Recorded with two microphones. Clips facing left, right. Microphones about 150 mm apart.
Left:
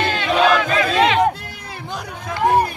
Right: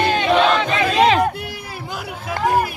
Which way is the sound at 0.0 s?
20° right (ahead or behind).